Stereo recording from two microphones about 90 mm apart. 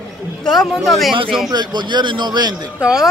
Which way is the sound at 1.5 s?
55° right (ahead or behind).